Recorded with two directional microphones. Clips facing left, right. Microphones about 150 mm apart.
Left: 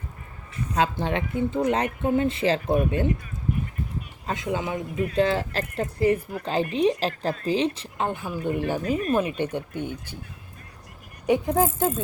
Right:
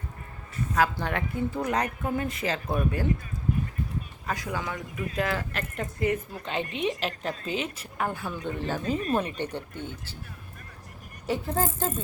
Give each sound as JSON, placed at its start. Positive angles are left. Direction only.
{"t": 0.7, "sound": "speech", "side_deg": 20}
{"t": 4.3, "sound": "a woman's voice", "side_deg": 25}
{"t": 8.8, "sound": "speech", "side_deg": -30}
{"t": 9.1, "sound": "speech", "side_deg": 10}
{"t": 11.3, "sound": "speech", "side_deg": 15}